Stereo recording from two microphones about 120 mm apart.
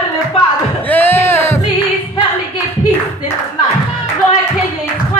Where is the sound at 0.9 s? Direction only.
15° left (ahead or behind).